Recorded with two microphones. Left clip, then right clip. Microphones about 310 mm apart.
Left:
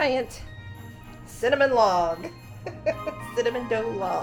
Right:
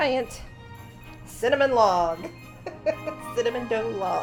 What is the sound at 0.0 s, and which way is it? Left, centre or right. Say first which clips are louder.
Speech: even; centre.